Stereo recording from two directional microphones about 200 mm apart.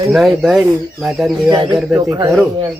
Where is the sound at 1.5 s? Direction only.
20° right (ahead or behind).